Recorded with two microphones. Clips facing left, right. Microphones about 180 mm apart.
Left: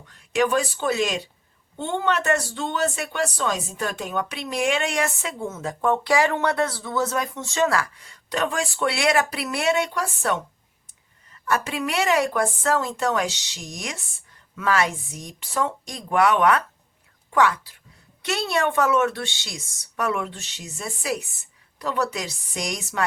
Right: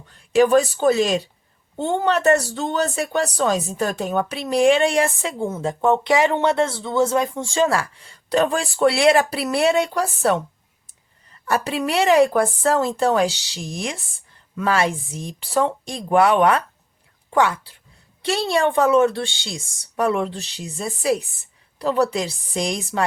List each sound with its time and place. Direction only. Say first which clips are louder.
0.3 s speech: right 7 dB; 35° right (ahead or behind)
11.4 s a woman's voice: right 3 dB; 30° right (ahead or behind)